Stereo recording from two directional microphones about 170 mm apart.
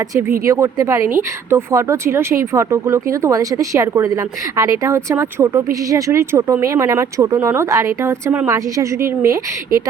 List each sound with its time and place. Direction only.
0.1 s speech: 15° right (ahead or behind)